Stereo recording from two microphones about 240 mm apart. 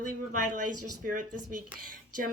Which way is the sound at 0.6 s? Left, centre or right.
Right.